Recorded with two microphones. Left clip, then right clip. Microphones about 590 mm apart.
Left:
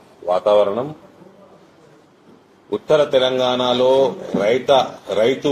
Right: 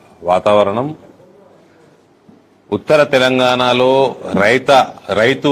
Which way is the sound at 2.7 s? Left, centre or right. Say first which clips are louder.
Right 4 dB; right.